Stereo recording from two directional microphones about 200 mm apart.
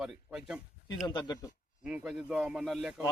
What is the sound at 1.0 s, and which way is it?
Speech, 20° left (ahead or behind).